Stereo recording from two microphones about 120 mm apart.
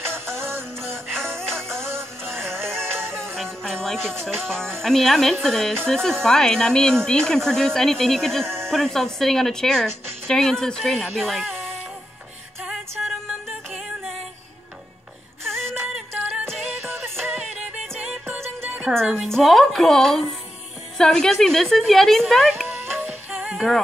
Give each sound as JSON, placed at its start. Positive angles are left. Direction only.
{"t": 0.0, "sound": "music", "side_deg": 5}
{"t": 3.0, "sound": "music", "side_deg": 5}
{"t": 4.8, "sound": "speech", "side_deg": 5}
{"t": 12.6, "sound": "music", "side_deg": 0}
{"t": 15.4, "sound": "a sound", "side_deg": 5}
{"t": 16.1, "sound": "music", "side_deg": 0}
{"t": 18.8, "sound": "a woman's voice", "side_deg": -5}